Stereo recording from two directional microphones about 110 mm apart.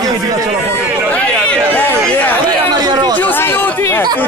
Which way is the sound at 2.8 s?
40° right (ahead or behind).